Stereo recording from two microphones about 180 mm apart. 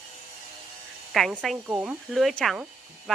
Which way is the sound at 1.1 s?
Centre (ahead or behind).